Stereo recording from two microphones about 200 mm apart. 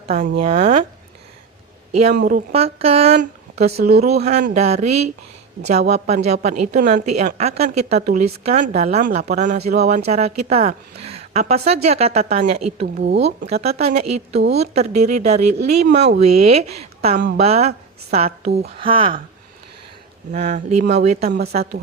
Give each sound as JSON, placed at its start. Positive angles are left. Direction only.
{"t": 0.4, "sound": "speech", "side_deg": -30}
{"t": 2.0, "sound": "a woman's voice", "side_deg": -40}
{"t": 6.2, "sound": "a woman's voice", "side_deg": -35}
{"t": 13.4, "sound": "speech", "side_deg": -50}
{"t": 13.7, "sound": "a woman's voice", "side_deg": -30}
{"t": 15.5, "sound": "speech", "side_deg": -55}
{"t": 16.2, "sound": "a woman's voice", "side_deg": -30}
{"t": 20.3, "sound": "a woman's voice", "side_deg": -35}
{"t": 21.2, "sound": "speech", "side_deg": -50}